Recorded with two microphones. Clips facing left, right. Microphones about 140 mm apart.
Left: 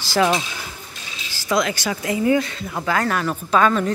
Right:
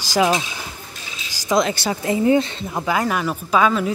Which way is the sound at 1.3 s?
20° right (ahead or behind).